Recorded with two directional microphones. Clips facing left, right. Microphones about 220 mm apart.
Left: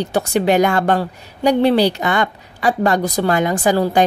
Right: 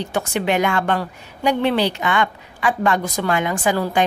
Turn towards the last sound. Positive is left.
turn(degrees=35)  # may be behind; listen again after turning